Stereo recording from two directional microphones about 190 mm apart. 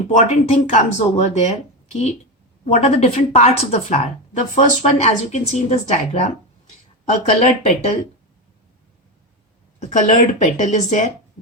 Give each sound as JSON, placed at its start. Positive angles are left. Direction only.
{"t": 0.2, "sound": "a woman's voice", "side_deg": 40}
{"t": 9.8, "sound": "a woman's voice", "side_deg": 40}